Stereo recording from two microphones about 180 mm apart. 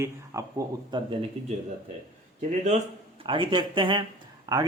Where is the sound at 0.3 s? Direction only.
15° right (ahead or behind).